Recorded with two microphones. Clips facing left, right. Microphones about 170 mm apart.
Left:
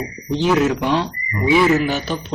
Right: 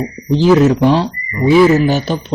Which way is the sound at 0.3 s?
35° right (ahead or behind).